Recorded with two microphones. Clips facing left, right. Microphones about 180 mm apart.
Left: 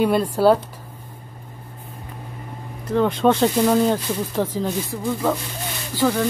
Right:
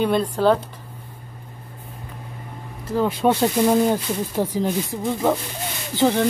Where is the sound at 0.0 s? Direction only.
5° left (ahead or behind).